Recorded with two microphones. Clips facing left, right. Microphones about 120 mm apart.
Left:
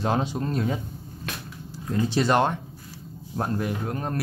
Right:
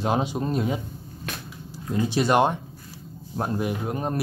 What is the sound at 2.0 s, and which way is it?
Speech, 15° right (ahead or behind).